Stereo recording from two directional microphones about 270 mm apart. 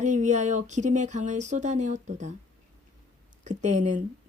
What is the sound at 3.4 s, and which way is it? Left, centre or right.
Speech, right.